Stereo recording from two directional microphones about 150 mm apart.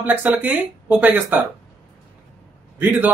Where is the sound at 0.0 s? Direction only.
10° right (ahead or behind).